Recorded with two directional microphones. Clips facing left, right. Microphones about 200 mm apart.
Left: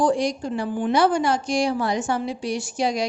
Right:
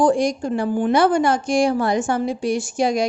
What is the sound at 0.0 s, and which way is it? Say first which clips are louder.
A woman's voice: right 4 dB; 50° right (ahead or behind).